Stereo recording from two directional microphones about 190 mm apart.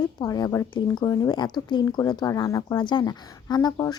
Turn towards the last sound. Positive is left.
turn(degrees=20)  # may be behind; listen again after turning